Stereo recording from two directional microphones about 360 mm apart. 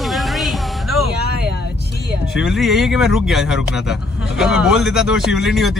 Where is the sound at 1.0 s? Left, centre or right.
Left.